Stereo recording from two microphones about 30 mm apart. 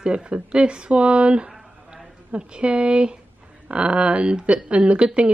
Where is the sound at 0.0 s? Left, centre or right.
Right.